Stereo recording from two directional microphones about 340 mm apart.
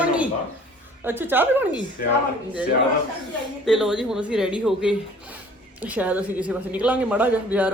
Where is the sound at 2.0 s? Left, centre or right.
Left.